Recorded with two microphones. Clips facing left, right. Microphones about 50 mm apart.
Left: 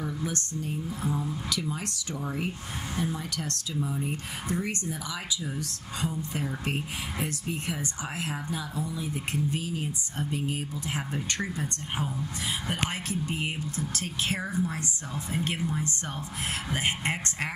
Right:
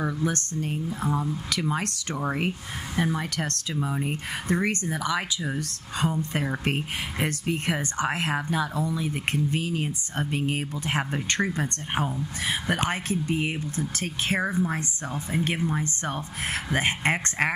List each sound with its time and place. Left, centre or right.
0.0 s a woman's voice: right
12.8 s speech: right